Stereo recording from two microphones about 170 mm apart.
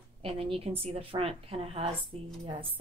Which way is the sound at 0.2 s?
35° right (ahead or behind).